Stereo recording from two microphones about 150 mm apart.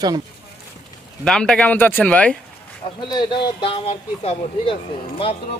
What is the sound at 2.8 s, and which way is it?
Speech, 30° left (ahead or behind).